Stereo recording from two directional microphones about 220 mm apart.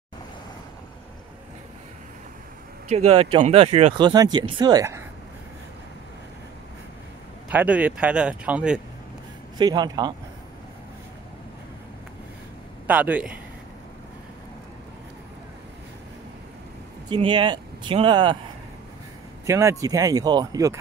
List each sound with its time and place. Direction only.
2.9 s speech: 30° right (ahead or behind)
7.4 s speech: 5° right (ahead or behind)
9.6 s speech: 20° right (ahead or behind)
12.8 s speech: 5° right (ahead or behind)
17.1 s speech: 20° right (ahead or behind)
19.4 s speech: 15° right (ahead or behind)